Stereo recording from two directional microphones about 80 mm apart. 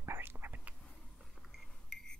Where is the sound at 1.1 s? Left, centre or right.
Centre.